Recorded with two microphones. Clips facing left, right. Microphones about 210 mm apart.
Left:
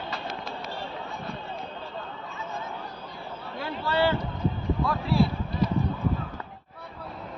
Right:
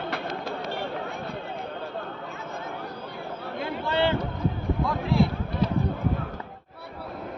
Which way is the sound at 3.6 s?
20° right (ahead or behind).